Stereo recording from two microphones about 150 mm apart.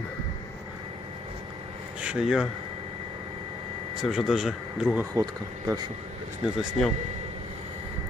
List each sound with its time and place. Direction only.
2.0 s speech: 5° right (ahead or behind)
4.0 s speech: centre (ahead or behind)
5.1 s speech: 25° right (ahead or behind)
6.4 s speech: centre (ahead or behind)